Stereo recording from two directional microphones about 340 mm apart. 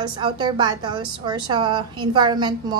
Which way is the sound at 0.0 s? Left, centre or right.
Centre.